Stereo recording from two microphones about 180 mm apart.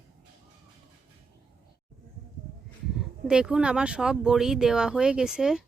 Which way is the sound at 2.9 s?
5° right (ahead or behind).